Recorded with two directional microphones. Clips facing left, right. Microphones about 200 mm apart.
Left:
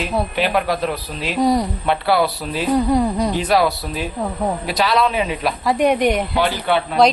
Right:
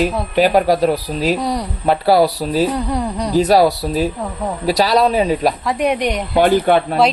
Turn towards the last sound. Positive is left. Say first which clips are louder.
# right 6 dB
turn(degrees=-45)  # may be behind; listen again after turning